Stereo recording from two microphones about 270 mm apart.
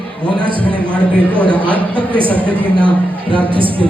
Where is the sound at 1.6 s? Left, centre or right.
Centre.